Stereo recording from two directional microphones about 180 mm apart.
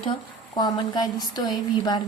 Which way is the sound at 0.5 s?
25° left (ahead or behind).